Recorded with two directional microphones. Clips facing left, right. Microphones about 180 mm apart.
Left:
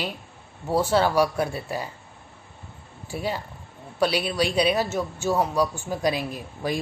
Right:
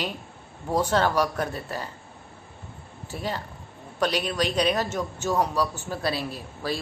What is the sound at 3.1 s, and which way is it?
A man's voice, 10° left (ahead or behind).